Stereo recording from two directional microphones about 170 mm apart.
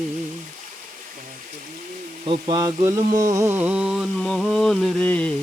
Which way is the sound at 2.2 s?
25° right (ahead or behind).